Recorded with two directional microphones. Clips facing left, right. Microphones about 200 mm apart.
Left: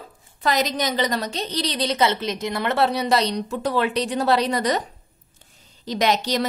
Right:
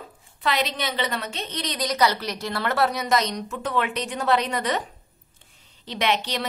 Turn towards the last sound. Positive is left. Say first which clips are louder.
# left 4 dB
turn(degrees=40)  # may be behind; listen again after turning